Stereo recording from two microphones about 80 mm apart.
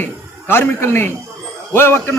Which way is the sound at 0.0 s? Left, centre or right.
Left.